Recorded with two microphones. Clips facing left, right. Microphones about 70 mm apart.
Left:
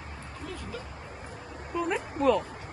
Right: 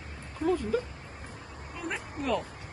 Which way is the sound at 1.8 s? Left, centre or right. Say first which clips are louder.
Left 7 dB; centre.